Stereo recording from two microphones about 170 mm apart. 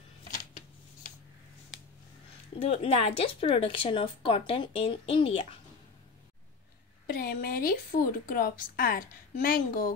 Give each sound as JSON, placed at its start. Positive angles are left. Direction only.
{"t": 2.6, "sound": "speech", "side_deg": 35}
{"t": 7.1, "sound": "a woman's voice", "side_deg": 60}